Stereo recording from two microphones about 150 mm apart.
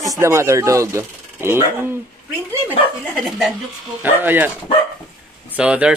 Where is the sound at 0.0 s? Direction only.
20° right (ahead or behind).